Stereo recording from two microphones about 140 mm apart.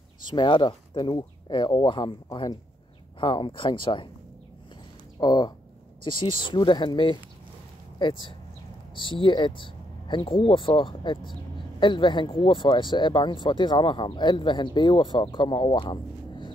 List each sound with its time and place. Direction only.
0.3 s speech: 35° left (ahead or behind)
5.2 s speech: 30° left (ahead or behind)